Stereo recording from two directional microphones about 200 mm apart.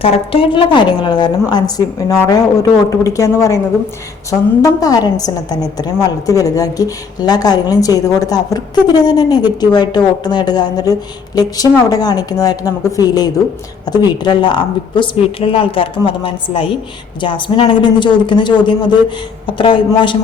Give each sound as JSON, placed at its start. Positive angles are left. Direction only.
{"t": 0.0, "sound": "a woman's voice", "side_deg": 30}